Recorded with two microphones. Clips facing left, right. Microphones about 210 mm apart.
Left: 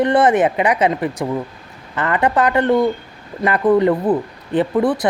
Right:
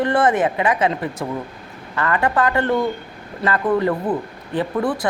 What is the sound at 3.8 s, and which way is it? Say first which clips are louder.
Speech: left 5 dB; 20° left (ahead or behind).